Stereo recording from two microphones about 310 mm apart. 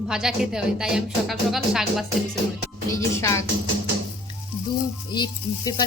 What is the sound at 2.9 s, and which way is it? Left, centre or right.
Speech, centre.